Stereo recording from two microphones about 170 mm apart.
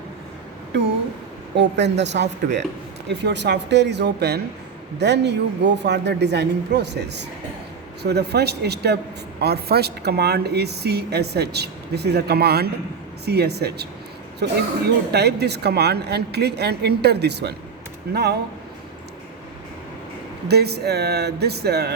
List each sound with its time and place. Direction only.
1.5 s speech: 90° right
8.0 s speech: 75° right (ahead or behind)
20.5 s speech: 70° right (ahead or behind)